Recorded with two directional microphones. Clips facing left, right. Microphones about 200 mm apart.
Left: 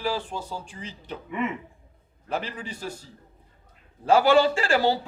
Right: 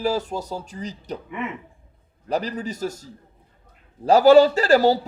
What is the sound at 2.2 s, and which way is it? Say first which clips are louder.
A man's voice: right 6 dB; 40° right (ahead or behind).